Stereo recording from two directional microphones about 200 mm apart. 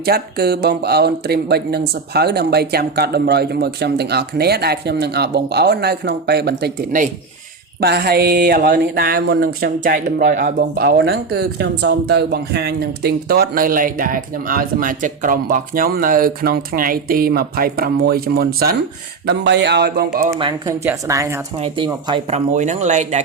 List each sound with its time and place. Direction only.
0.0 s speech: 50° right (ahead or behind)
20.3 s speech: 15° right (ahead or behind)
22.0 s speech: 30° right (ahead or behind)